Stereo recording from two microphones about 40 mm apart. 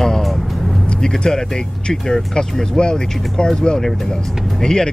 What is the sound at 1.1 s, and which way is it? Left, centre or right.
Speech, centre.